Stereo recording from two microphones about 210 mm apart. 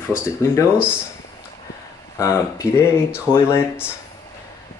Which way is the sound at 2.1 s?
15° left (ahead or behind).